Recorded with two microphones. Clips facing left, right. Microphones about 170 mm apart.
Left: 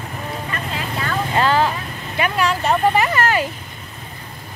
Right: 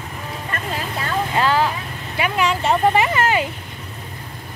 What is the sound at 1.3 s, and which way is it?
Vehicle, 5° right (ahead or behind).